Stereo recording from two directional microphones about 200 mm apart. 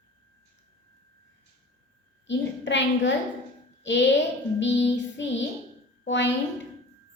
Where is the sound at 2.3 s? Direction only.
60° left (ahead or behind).